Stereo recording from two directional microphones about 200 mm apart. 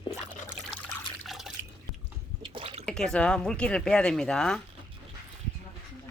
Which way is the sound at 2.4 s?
25° right (ahead or behind).